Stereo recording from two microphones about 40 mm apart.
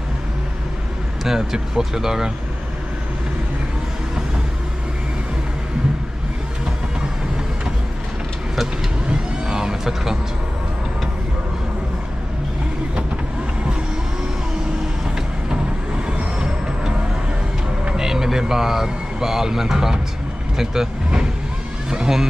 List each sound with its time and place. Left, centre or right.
1.2 s speech: centre
9.5 s vehicle: centre
16.1 s vehicle: right
17.9 s speech: centre